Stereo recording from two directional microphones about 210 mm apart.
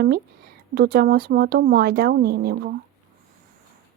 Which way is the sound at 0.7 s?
45° right (ahead or behind).